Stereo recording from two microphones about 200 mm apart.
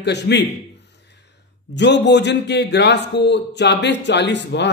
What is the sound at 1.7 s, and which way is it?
Speech, 60° left (ahead or behind).